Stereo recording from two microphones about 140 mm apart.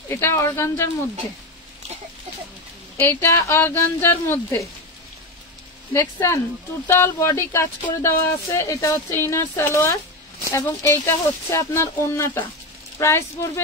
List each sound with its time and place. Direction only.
0.1 s speech: 20° left (ahead or behind)
3.0 s a woman's voice: 20° left (ahead or behind)
5.9 s speech: 20° left (ahead or behind)